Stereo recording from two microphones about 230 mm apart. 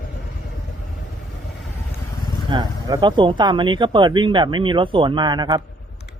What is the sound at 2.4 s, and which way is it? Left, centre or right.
Speech, centre.